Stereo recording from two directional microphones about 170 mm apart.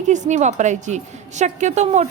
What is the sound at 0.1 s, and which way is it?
A woman's voice, 45° right (ahead or behind).